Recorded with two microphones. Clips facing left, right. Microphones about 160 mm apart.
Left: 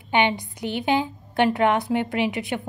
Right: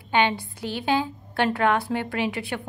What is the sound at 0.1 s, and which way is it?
A woman's voice, 15° left (ahead or behind).